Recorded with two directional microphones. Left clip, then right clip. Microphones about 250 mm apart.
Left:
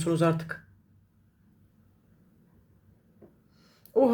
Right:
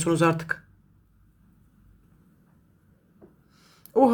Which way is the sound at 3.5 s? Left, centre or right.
Centre.